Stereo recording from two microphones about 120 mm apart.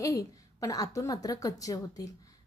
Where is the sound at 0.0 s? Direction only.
30° left (ahead or behind).